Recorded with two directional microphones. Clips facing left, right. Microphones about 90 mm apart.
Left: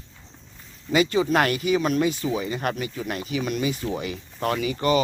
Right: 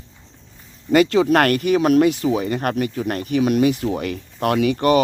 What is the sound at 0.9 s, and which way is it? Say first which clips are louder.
A man's voice: right 6 dB; 65° right (ahead or behind).